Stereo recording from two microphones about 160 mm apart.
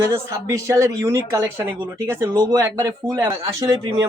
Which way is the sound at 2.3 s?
25° right (ahead or behind).